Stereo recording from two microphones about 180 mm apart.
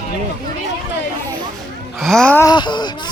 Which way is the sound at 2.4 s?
25° left (ahead or behind).